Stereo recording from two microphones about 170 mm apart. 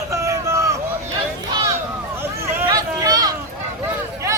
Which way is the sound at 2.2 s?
20° right (ahead or behind).